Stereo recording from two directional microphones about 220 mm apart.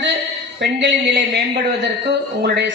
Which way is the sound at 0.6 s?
55° right (ahead or behind).